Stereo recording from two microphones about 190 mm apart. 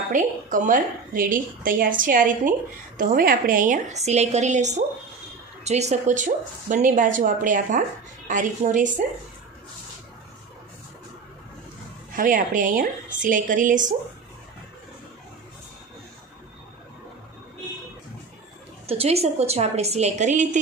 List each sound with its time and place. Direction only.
0.1 s a woman's voice: 45° right (ahead or behind)
12.1 s a woman's voice: 45° right (ahead or behind)
18.9 s a woman's voice: 30° right (ahead or behind)